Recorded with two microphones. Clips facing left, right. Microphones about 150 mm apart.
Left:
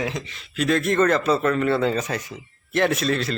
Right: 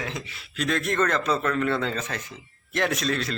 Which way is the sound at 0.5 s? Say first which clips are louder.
Left 5 dB; centre (ahead or behind).